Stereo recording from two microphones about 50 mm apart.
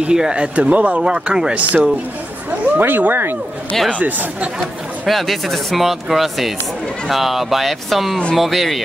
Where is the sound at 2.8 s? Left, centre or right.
Right.